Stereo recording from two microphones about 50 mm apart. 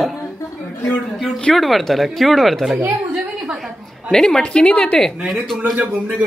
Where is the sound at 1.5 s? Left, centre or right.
Centre.